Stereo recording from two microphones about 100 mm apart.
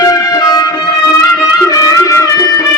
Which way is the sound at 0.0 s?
35° left (ahead or behind).